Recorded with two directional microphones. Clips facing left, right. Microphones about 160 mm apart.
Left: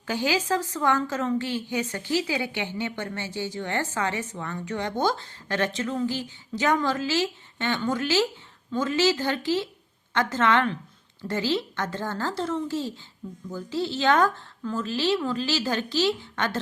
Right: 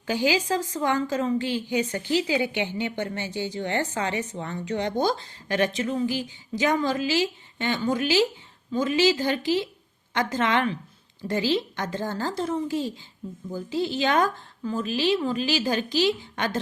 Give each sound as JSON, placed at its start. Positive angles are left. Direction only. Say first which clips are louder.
{"t": 0.1, "sound": "a woman's voice", "louder": "right 1 dB", "side_deg": -15}